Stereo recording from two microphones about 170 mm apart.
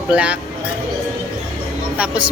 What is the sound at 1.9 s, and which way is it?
Speech, 5° right (ahead or behind).